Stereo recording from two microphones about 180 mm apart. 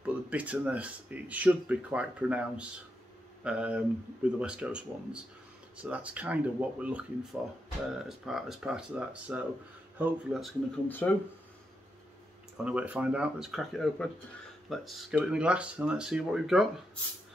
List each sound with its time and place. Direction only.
0.0 s speech: 10° right (ahead or behind)
10.9 s speech: 10° left (ahead or behind)
12.6 s speech: 5° right (ahead or behind)